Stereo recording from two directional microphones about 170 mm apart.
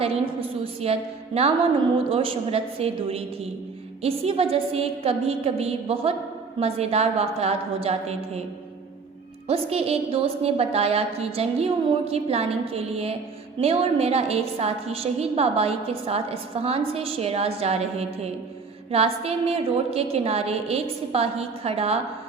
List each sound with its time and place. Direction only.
0.0 s a woman's voice: 35° right (ahead or behind)
9.5 s a woman's voice: 35° right (ahead or behind)